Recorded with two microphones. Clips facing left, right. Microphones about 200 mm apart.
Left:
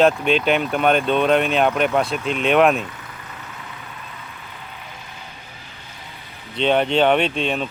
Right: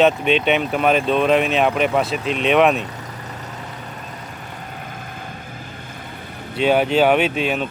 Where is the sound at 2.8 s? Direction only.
40° right (ahead or behind).